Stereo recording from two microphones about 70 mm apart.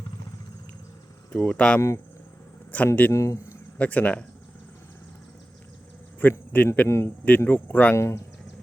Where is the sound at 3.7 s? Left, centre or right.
Left.